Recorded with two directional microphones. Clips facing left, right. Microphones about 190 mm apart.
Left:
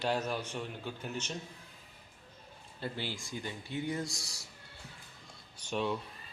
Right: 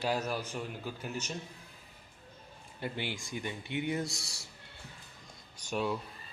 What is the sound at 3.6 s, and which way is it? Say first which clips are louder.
Speech: right 2 dB; 65° right (ahead or behind).